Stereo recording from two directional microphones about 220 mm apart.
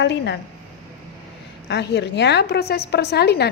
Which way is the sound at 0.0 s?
50° left (ahead or behind).